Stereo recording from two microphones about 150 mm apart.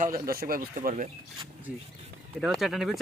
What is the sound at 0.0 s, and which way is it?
Speech, 75° right (ahead or behind).